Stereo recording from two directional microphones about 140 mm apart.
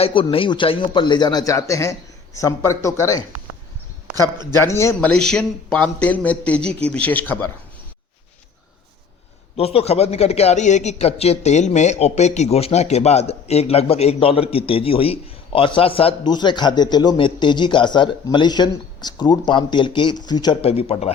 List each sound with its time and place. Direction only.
0.0 s speech: 40° left (ahead or behind); by 3.2 s 20° left (ahead or behind)
4.5 s speech: 20° left (ahead or behind)
4.9 s speech: 5° left (ahead or behind)
9.6 s a man's voice: 45° left (ahead or behind)
20.6 s a man's voice: 45° left (ahead or behind)